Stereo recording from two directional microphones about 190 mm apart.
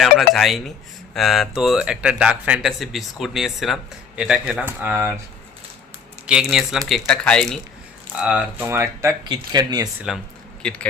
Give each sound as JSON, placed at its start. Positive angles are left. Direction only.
{"t": 0.0, "sound": "speech", "side_deg": 0}
{"t": 6.2, "sound": "speech", "side_deg": -5}
{"t": 10.6, "sound": "speech", "side_deg": 5}